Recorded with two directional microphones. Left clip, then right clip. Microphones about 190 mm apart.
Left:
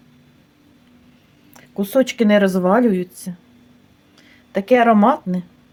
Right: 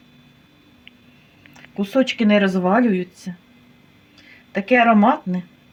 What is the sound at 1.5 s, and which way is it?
Speech, 25° left (ahead or behind).